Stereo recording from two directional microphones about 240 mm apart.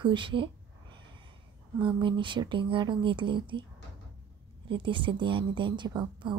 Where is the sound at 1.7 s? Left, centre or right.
Centre.